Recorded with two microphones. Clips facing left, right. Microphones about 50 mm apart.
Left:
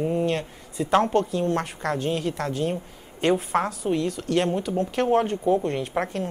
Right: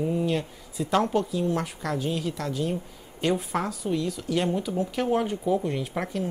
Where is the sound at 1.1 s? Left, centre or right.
Left.